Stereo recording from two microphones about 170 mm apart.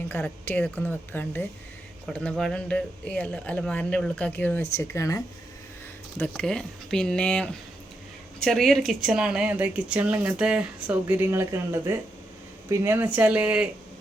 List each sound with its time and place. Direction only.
0.1 s speech: 10° left (ahead or behind)
6.1 s speech: 5° left (ahead or behind)